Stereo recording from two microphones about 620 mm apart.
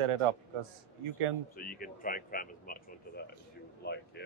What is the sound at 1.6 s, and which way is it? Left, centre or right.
Speech, centre.